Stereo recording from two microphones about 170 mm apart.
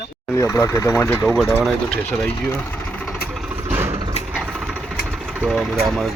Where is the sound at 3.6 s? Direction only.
15° right (ahead or behind).